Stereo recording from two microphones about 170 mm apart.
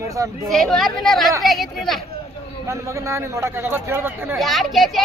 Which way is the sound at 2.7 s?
15° right (ahead or behind).